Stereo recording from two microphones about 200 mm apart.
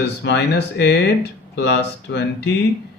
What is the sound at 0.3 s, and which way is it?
Speech, 55° left (ahead or behind).